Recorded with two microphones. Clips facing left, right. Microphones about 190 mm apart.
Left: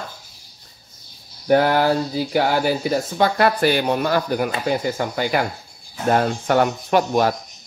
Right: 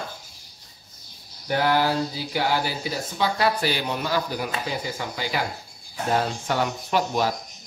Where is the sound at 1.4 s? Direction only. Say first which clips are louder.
Left 6 dB; 50° left (ahead or behind).